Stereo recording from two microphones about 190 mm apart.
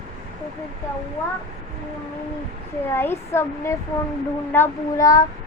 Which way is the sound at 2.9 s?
10° left (ahead or behind).